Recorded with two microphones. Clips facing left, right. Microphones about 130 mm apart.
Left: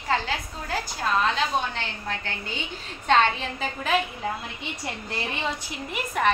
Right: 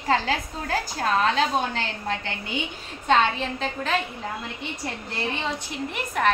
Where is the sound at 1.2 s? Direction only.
40° right (ahead or behind).